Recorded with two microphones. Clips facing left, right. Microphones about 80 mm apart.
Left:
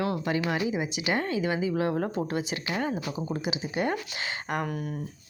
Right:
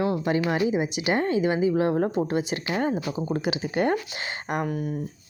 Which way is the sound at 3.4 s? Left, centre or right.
Right.